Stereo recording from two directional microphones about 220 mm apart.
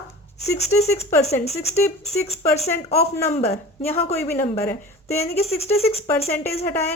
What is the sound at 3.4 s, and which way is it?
A woman's voice, 10° left (ahead or behind).